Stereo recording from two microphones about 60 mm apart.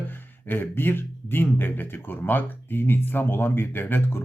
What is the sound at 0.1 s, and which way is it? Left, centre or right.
Speech, left.